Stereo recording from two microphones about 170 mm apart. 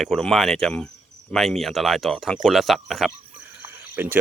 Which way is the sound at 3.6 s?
15° right (ahead or behind).